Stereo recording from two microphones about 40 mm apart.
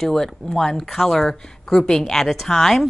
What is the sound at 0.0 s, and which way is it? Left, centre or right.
Speech, centre.